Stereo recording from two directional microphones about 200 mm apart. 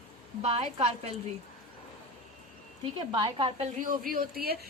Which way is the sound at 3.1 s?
25° right (ahead or behind).